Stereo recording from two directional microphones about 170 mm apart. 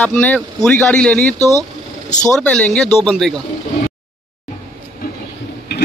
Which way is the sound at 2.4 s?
5° left (ahead or behind).